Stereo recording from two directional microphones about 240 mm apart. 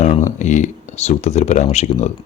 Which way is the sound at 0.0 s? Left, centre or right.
Left.